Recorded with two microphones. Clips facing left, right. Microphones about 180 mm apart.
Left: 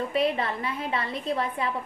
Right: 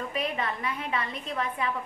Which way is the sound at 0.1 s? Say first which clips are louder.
Left 6 dB; 30° left (ahead or behind).